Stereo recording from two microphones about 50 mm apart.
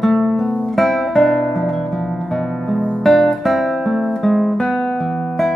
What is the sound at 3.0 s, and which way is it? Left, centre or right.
Guitar, centre.